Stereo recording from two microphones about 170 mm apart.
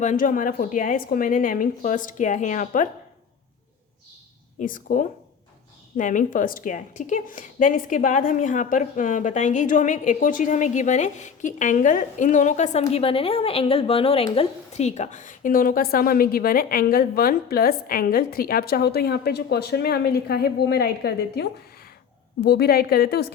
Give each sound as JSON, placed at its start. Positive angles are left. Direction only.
{"t": 0.0, "sound": "a woman's voice", "side_deg": 50}
{"t": 4.6, "sound": "a woman's voice", "side_deg": 55}